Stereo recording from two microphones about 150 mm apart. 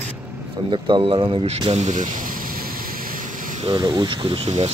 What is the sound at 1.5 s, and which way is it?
Speech, 45° right (ahead or behind).